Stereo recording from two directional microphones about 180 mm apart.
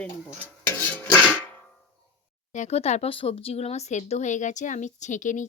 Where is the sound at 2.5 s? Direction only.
40° left (ahead or behind).